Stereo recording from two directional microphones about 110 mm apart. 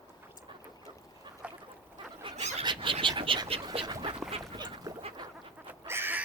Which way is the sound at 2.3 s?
85° right.